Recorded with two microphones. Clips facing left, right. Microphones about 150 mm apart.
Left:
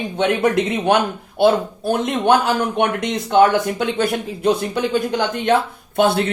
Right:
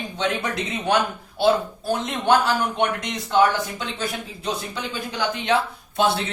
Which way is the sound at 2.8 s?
55° left (ahead or behind).